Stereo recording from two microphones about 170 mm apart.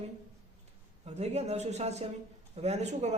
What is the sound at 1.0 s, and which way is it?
A man's voice, 40° right (ahead or behind).